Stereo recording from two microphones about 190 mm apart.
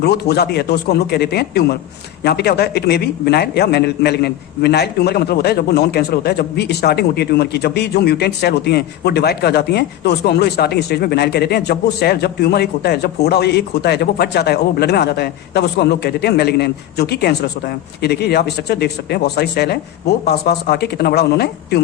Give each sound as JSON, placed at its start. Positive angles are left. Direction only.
{"t": 0.0, "sound": "a man's voice", "side_deg": 55}